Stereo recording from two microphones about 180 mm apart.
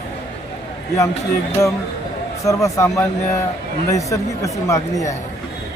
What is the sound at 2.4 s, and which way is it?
Speech, 15° left (ahead or behind).